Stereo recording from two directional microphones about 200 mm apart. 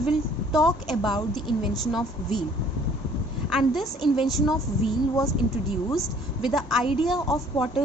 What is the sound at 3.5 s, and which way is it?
A woman's voice, centre (ahead or behind).